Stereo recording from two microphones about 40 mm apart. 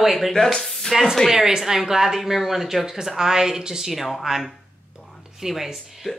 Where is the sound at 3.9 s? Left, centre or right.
Centre.